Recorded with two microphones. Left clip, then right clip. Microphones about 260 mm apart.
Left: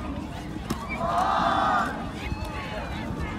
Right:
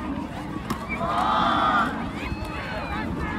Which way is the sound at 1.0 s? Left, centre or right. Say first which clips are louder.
Right 1 dB; centre.